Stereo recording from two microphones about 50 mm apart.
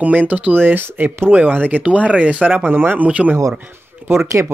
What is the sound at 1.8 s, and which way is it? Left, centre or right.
Speech, right.